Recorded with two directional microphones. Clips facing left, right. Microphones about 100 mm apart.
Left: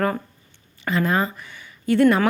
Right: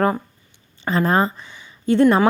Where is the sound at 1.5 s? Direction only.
20° right (ahead or behind).